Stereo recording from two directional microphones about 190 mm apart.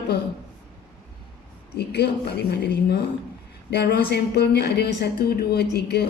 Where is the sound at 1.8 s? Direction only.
60° left (ahead or behind).